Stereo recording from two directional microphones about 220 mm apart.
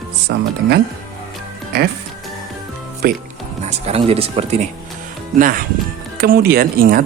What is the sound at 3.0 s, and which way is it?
Speech, 45° right (ahead or behind).